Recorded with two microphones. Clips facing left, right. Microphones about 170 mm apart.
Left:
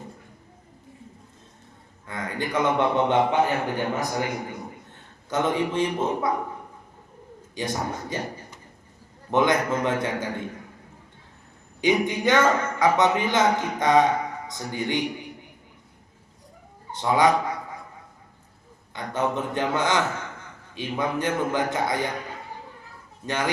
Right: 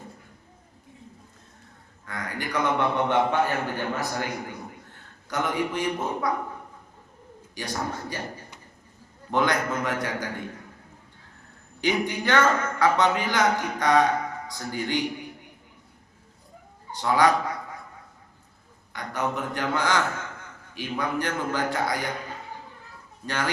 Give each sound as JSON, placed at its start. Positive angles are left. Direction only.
{"t": 2.0, "sound": "a man's voice", "side_deg": 25}
{"t": 7.5, "sound": "speech", "side_deg": 20}
{"t": 9.3, "sound": "speech", "side_deg": 20}
{"t": 11.8, "sound": "speech", "side_deg": 20}
{"t": 17.0, "sound": "speech", "side_deg": 20}
{"t": 18.9, "sound": "speech", "side_deg": 25}
{"t": 23.2, "sound": "speech", "side_deg": 20}